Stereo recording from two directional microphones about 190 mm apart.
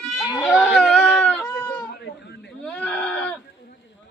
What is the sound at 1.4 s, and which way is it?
Goat, 5° left (ahead or behind).